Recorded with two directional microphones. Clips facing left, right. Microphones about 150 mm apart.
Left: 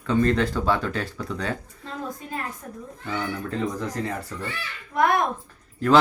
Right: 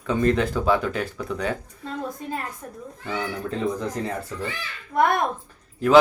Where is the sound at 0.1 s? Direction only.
10° right (ahead or behind).